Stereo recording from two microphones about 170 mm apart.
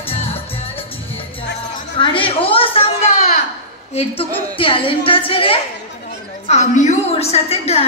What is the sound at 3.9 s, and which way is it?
A woman's voice, 35° left (ahead or behind).